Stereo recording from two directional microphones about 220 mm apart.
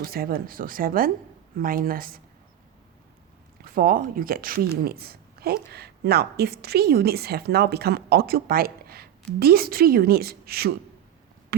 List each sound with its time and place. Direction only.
0.0 s speech: 45° right (ahead or behind)
3.6 s a woman's voice: 40° right (ahead or behind)